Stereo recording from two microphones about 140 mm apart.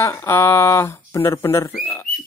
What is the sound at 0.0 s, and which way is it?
Speech, 20° left (ahead or behind).